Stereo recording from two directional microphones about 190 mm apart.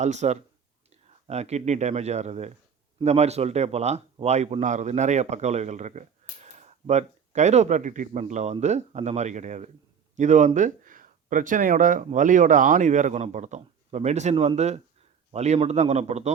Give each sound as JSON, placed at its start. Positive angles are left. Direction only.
{"t": 0.0, "sound": "speech", "side_deg": -40}